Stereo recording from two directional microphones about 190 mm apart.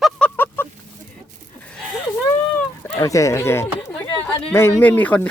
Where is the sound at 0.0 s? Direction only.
10° left (ahead or behind).